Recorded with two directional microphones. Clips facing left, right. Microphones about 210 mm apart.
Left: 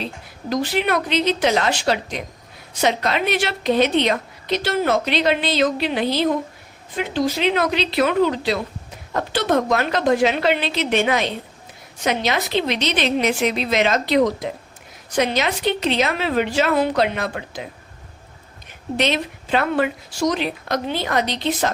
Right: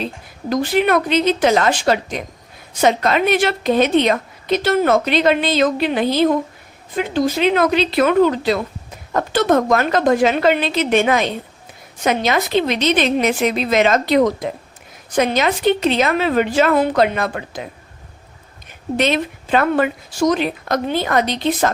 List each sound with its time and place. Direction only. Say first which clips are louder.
0.5 s a woman's voice: right 4 dB; 50° right (ahead or behind)
18.9 s a woman's voice: right 3 dB; 50° right (ahead or behind)